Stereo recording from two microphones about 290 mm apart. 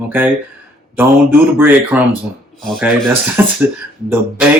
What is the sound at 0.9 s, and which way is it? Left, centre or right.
Speech, centre.